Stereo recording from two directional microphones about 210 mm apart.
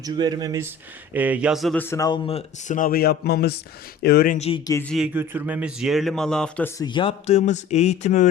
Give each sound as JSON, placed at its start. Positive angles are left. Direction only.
{"t": 0.0, "sound": "a man's voice", "side_deg": -20}
{"t": 4.4, "sound": "a man's voice", "side_deg": 25}
{"t": 4.9, "sound": "a man's voice", "side_deg": -5}